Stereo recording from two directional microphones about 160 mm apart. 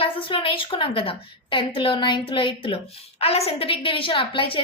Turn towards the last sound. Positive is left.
turn(degrees=35)  # may be behind; listen again after turning